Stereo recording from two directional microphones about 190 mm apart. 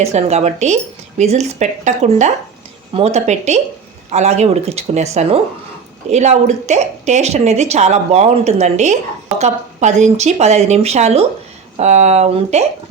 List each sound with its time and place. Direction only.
0.0 s a woman's voice: 35° right (ahead or behind)
6.1 s a woman's voice: 35° right (ahead or behind)